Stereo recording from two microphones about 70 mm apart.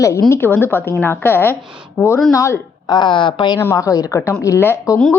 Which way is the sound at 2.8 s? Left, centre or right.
Left.